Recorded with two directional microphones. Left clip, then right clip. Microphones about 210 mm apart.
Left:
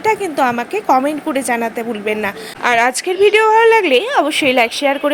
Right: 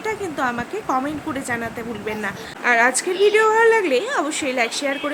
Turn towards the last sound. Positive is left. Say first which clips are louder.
# left 8 dB
turn(degrees=25)  # may be behind; listen again after turning